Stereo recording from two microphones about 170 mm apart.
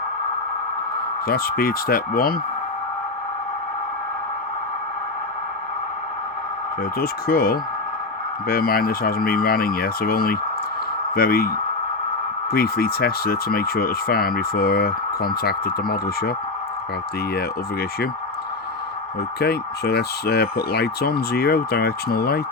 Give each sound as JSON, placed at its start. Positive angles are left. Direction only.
{"t": 1.3, "sound": "speech", "side_deg": 60}
{"t": 7.0, "sound": "speech", "side_deg": 60}
{"t": 17.3, "sound": "speech", "side_deg": 65}
{"t": 19.4, "sound": "speech", "side_deg": 70}